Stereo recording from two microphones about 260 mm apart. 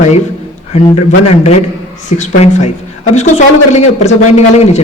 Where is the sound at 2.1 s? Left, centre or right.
Left.